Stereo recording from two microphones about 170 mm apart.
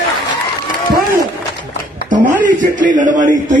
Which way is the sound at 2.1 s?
50° right (ahead or behind).